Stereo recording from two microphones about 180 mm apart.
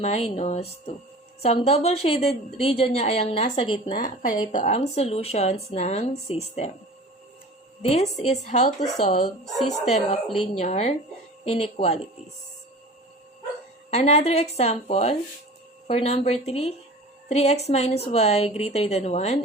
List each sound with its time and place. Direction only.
0.0 s a woman's voice: 35° left (ahead or behind)
3.9 s speech: 50° left (ahead or behind)
4.5 s a woman's voice: 40° left (ahead or behind)
7.8 s a woman's voice: 35° left (ahead or behind)
9.4 s speech: centre (ahead or behind)
10.6 s a woman's voice: 35° left (ahead or behind)
13.9 s a woman's voice: 35° left (ahead or behind)